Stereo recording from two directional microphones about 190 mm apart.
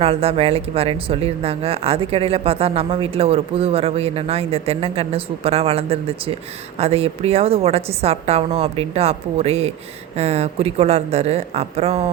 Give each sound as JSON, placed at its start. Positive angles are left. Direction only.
{"t": 0.0, "sound": "speech", "side_deg": -30}